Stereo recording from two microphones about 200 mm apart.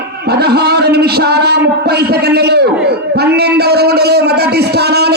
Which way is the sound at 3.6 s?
55° right (ahead or behind).